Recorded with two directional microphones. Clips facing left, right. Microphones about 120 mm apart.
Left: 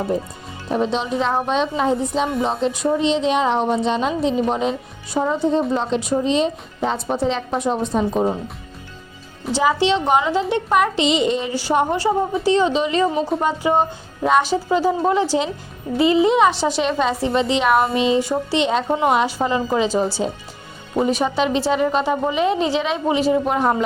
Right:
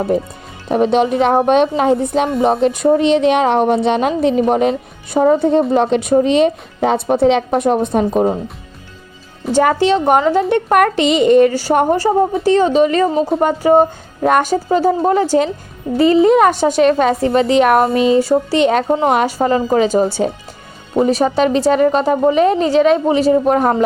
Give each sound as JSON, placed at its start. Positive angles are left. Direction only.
{"t": 0.7, "sound": "a woman's voice", "side_deg": -60}
{"t": 9.5, "sound": "a woman's voice", "side_deg": -50}
{"t": 21.1, "sound": "a woman's voice", "side_deg": -40}